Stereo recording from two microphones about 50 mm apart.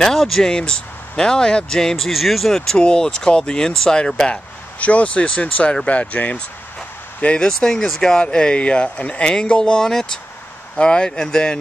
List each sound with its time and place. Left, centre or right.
0.0 s speech: centre
0.6 s speech: centre
4.3 s speech: left
7.4 s speech: centre